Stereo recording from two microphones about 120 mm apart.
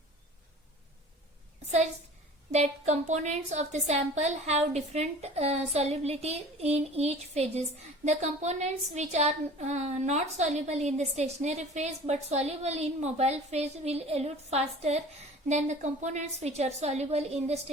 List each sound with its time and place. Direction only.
2.5 s a woman's voice: 70° right (ahead or behind)
15.4 s a woman's voice: 75° right (ahead or behind)